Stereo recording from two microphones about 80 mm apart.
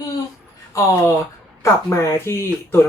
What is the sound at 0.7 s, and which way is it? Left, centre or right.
Speech, left.